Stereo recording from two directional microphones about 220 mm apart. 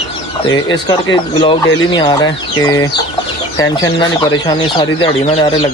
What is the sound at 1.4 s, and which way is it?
Speech, 20° left (ahead or behind).